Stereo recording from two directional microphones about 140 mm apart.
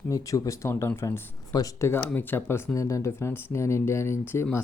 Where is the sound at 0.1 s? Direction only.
25° left (ahead or behind).